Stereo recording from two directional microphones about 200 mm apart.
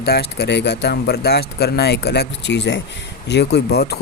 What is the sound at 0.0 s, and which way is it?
Speech, 55° left (ahead or behind).